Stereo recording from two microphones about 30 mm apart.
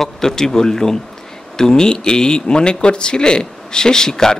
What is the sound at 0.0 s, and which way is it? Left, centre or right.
A man's voice, centre.